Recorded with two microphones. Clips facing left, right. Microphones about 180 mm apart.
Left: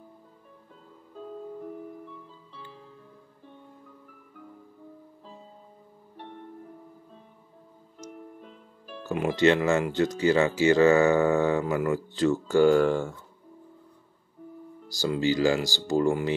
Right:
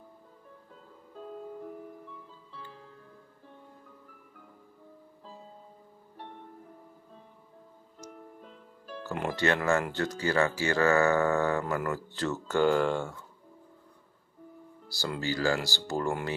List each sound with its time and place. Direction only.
9.0 s speech: 15° left (ahead or behind)
14.9 s speech: 15° left (ahead or behind)